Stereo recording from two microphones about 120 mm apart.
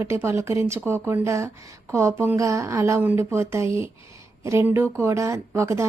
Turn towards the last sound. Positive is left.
turn(degrees=-25)  # may be behind; listen again after turning